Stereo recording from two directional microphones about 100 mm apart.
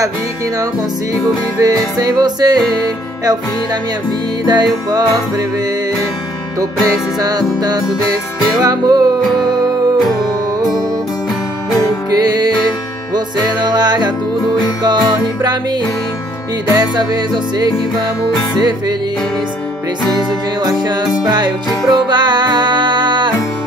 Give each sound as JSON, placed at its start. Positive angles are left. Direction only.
{"t": 1.6, "sound": "music", "side_deg": -40}
{"t": 4.5, "sound": "music", "side_deg": -40}
{"t": 7.2, "sound": "music", "side_deg": -40}
{"t": 12.1, "sound": "music", "side_deg": -40}
{"t": 16.7, "sound": "music", "side_deg": -45}
{"t": 20.2, "sound": "music", "side_deg": -45}